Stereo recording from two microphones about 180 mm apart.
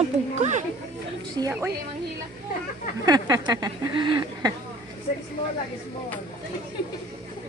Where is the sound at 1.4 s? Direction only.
15° right (ahead or behind).